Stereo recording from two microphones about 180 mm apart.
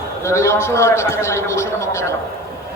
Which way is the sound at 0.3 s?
15° left (ahead or behind).